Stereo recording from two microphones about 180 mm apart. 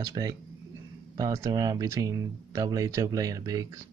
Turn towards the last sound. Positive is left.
turn(degrees=-20)  # may be behind; listen again after turning